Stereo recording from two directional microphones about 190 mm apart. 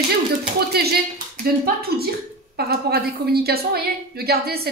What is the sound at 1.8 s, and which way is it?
A woman's voice, 55° right (ahead or behind).